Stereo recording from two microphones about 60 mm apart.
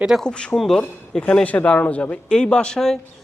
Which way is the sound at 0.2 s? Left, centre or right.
Centre.